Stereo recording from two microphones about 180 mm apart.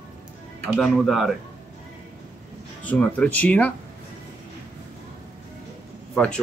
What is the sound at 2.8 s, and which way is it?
Speech, 10° left (ahead or behind).